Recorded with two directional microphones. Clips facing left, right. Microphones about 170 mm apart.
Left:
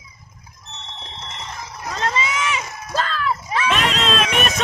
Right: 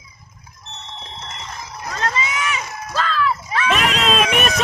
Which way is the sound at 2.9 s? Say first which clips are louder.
Right 2 dB; 45° left (ahead or behind).